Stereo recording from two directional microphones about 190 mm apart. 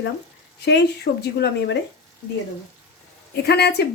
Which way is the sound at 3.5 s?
60° left (ahead or behind).